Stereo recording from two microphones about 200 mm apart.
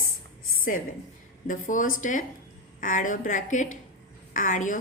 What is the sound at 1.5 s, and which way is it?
A woman's voice, 40° left (ahead or behind).